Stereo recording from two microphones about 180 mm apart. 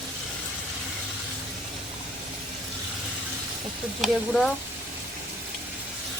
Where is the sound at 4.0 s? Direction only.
Centre (ahead or behind).